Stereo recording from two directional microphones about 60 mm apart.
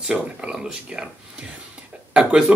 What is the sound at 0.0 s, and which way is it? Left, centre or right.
Speech, centre.